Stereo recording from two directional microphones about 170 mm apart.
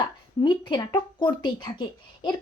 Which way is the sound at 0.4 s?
30° left (ahead or behind).